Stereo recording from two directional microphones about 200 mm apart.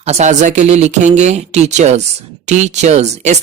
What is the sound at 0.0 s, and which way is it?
Speech, 35° right (ahead or behind).